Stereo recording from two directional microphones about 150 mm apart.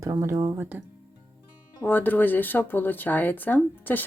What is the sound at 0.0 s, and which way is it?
Speech, 20° right (ahead or behind).